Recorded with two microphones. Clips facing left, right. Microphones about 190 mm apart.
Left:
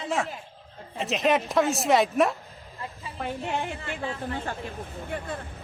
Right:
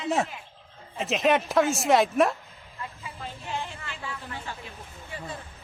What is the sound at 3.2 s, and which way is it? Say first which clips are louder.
Speech: left 6 dB; 65° left (ahead or behind).